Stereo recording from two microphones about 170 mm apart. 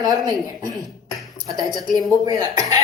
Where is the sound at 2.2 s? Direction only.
20° right (ahead or behind).